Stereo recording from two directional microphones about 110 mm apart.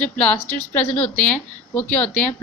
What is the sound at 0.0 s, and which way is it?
A woman's voice, 15° left (ahead or behind).